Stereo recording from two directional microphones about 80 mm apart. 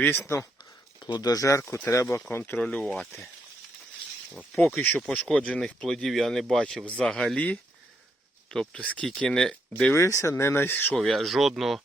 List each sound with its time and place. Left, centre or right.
0.0 s speech: left
0.6 s a sound: left
1.6 s speech: left
2.4 s speech: centre
2.8 s speech: centre
4.5 s speech: centre
9.9 s speech: left
10.9 s speech: centre